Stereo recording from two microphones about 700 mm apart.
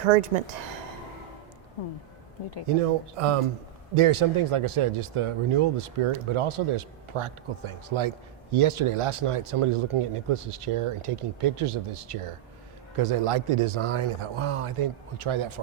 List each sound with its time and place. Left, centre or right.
0.0 s speech: right
2.8 s speech: right